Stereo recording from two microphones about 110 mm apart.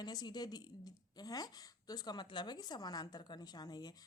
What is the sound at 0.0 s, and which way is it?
Speech, 40° left (ahead or behind).